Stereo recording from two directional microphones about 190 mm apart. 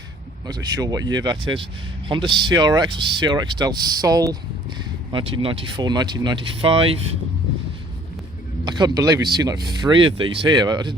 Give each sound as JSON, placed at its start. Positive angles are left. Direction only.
{"t": 0.4, "sound": "speech", "side_deg": -20}
{"t": 8.6, "sound": "speech", "side_deg": -20}